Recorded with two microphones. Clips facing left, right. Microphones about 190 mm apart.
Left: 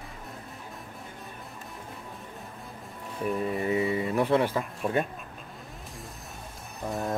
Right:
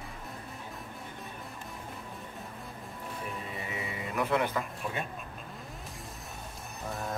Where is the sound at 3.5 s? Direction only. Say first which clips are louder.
Left 12 dB; 40° left (ahead or behind).